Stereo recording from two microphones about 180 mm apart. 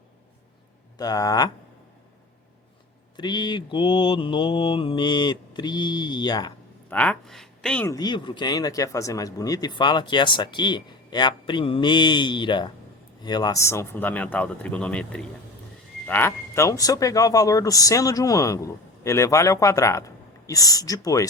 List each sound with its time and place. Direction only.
0.9 s speech: 20° left (ahead or behind)
3.2 s speech: 25° left (ahead or behind)
6.9 s speech: 5° left (ahead or behind)
7.9 s speech: 20° left (ahead or behind)